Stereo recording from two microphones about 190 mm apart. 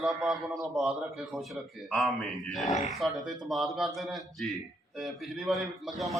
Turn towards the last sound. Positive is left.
turn(degrees=0)  # may be behind; listen again after turning